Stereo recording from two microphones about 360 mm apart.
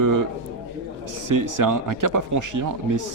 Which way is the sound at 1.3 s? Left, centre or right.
Right.